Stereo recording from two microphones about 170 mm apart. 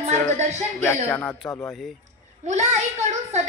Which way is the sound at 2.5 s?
45° right (ahead or behind).